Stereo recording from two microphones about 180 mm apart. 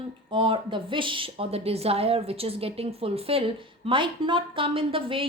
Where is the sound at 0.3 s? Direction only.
25° right (ahead or behind).